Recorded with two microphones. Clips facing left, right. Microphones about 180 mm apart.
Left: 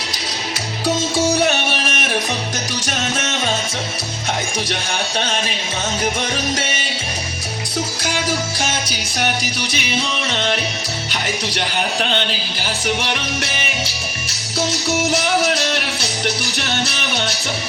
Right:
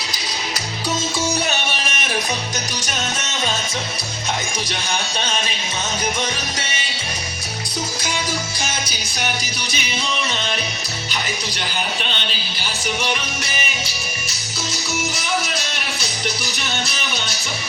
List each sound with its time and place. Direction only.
10.2 s music: 65° left (ahead or behind)
11.1 s speech: 80° left
15.4 s music: 80° left